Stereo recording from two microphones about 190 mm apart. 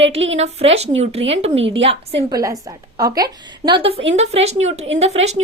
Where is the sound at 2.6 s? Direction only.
20° right (ahead or behind).